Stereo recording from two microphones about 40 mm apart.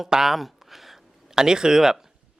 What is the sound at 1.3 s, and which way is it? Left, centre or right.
Speech, centre.